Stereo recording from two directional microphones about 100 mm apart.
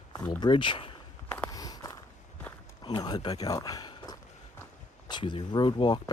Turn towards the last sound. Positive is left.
turn(degrees=45)  # may be behind; listen again after turning